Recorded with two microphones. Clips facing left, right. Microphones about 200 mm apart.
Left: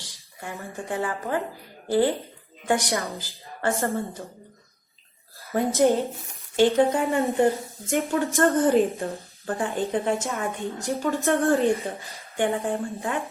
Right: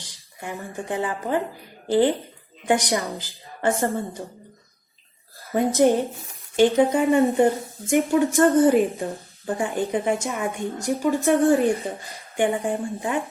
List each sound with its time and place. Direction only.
0.9 s a woman's voice: 15° right (ahead or behind)
5.5 s a woman's voice: 15° right (ahead or behind)